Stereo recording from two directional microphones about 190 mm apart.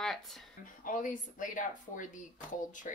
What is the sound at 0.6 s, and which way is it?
Speech, 45° left (ahead or behind).